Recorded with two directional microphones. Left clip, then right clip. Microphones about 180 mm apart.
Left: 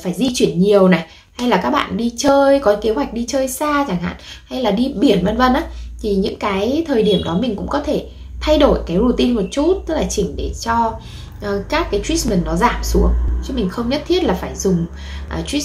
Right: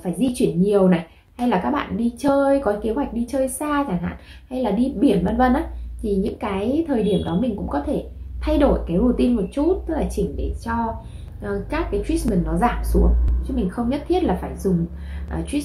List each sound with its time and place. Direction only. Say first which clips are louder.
0.0 s a woman's voice: left 4 dB; centre (ahead or behind)
12.9 s a woman's voice: left 4 dB; 15° left (ahead or behind)
13.7 s a woman's voice: left 5 dB; centre (ahead or behind)